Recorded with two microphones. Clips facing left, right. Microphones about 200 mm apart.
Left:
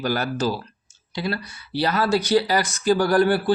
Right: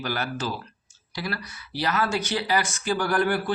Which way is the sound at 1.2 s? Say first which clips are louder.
Left 5 dB; 25° left (ahead or behind).